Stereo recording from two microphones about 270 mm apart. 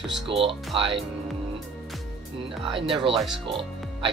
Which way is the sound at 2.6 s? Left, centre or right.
Centre.